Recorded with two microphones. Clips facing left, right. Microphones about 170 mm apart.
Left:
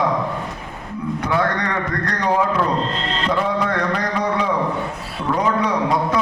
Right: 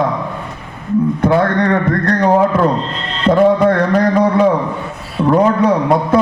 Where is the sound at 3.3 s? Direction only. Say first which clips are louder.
Right 11 dB; 50° right (ahead or behind).